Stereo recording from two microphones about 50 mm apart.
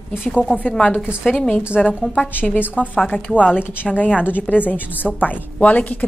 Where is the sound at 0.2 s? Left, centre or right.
Left.